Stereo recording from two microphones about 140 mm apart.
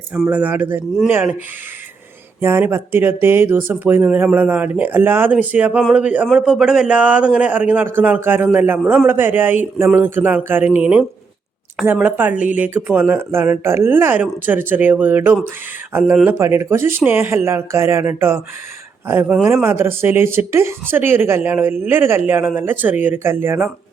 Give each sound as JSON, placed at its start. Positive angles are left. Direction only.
{"t": 0.1, "sound": "speech", "side_deg": -10}
{"t": 2.4, "sound": "speech", "side_deg": -20}